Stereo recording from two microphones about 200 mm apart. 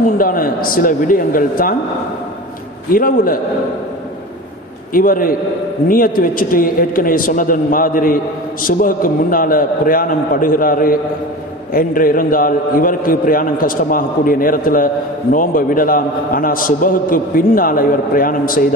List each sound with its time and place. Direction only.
0.2 s a man's voice: 45° left (ahead or behind)
2.9 s a man's voice: 45° left (ahead or behind)
4.9 s a man's voice: 45° left (ahead or behind)